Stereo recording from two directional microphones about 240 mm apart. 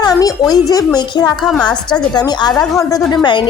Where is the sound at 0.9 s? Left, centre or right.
Centre.